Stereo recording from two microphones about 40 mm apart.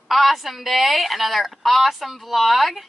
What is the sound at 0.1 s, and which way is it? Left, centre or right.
A woman's voice, centre.